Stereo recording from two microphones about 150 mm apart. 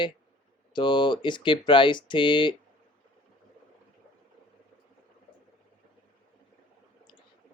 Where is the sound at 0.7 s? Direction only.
30° left (ahead or behind).